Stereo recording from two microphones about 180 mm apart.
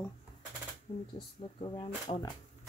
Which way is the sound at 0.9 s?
30° left (ahead or behind).